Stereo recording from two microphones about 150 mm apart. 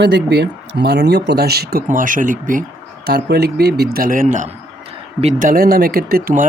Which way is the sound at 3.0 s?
90° right.